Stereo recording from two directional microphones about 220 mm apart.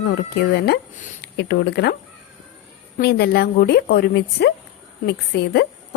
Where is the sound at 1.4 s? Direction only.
50° left (ahead or behind).